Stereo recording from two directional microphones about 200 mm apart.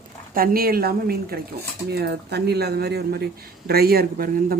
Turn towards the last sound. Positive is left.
turn(degrees=-50)  # may be behind; listen again after turning